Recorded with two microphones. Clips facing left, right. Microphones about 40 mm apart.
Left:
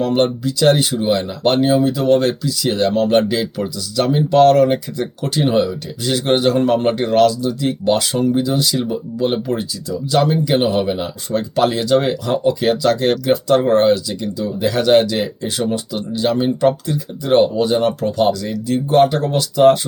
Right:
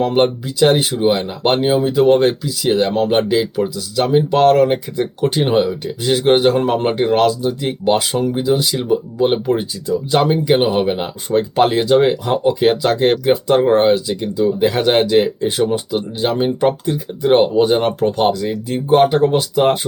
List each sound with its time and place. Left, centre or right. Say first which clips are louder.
0.0 s speech: right 1 dB; right